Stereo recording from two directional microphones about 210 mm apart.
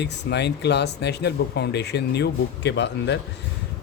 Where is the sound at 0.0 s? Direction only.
55° left (ahead or behind).